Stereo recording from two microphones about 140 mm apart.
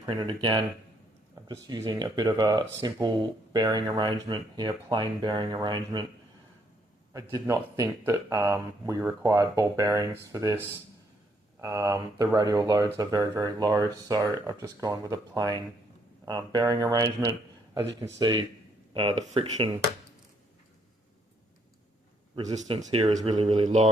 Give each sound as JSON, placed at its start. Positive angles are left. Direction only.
{"t": 0.1, "sound": "speech", "side_deg": -35}
{"t": 7.1, "sound": "speech", "side_deg": -25}
{"t": 22.9, "sound": "speech", "side_deg": -45}